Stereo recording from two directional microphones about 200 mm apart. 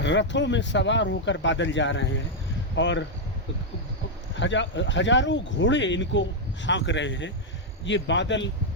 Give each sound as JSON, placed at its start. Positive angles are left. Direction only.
{"t": 0.0, "sound": "speech", "side_deg": 65}
{"t": 4.4, "sound": "speech", "side_deg": 65}